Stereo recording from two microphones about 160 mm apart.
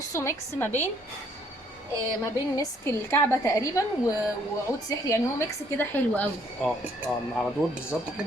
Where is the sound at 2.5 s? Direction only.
15° left (ahead or behind).